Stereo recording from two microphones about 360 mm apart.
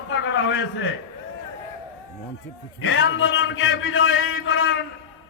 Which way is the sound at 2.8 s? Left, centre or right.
Left.